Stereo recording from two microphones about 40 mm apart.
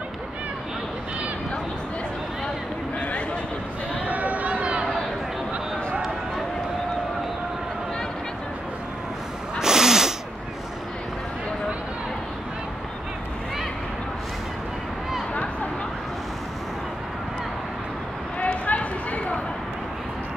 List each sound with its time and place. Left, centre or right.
4.0 s run: right
9.6 s sneeze: centre
18.4 s clip-clop: left